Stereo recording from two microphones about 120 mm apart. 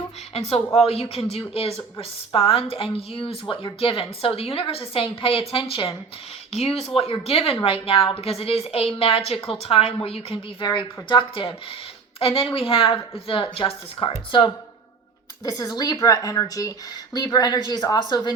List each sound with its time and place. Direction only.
0.3 s a woman's voice: 60° left (ahead or behind)
6.5 s a woman's voice: 60° left (ahead or behind)
10.7 s a woman's voice: 40° left (ahead or behind)